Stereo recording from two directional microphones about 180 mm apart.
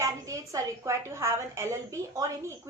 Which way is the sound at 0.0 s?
15° right (ahead or behind).